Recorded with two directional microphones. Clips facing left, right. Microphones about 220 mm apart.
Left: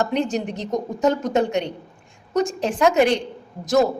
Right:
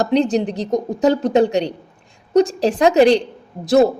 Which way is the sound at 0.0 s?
35° right (ahead or behind).